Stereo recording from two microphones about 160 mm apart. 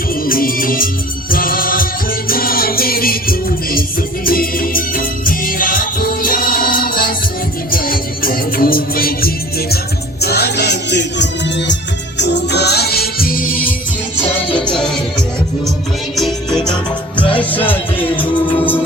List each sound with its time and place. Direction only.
0.3 s music: 60° left (ahead or behind)
10.2 s music: 90° left; by 13.5 s 65° left (ahead or behind)
16.1 s music: centre (ahead or behind)